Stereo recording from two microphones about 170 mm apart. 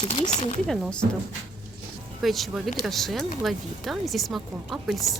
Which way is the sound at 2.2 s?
Centre (ahead or behind).